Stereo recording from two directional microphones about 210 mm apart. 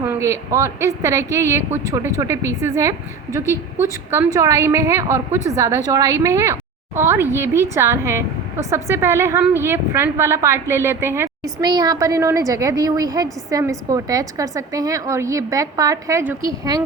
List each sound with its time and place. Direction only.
0.0 s a woman's voice: 15° right (ahead or behind)